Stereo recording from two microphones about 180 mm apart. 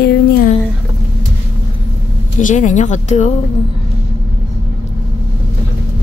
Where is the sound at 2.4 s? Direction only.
45° left (ahead or behind).